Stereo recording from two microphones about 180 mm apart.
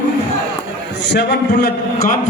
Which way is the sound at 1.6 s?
55° left (ahead or behind).